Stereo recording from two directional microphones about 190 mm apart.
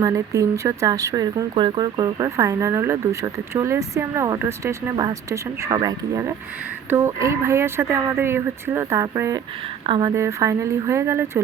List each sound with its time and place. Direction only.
0.0 s speech: 15° right (ahead or behind)
9.8 s a woman's voice: 25° right (ahead or behind)
10.1 s speech: 15° right (ahead or behind)